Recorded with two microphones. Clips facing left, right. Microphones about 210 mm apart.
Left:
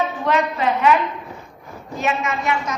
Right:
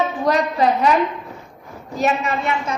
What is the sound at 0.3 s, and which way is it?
Speech, 40° right (ahead or behind).